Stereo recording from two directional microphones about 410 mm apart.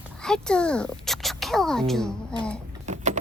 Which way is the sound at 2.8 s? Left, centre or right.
Centre.